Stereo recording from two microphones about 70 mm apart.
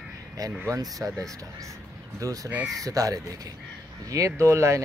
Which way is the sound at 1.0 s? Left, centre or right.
Right.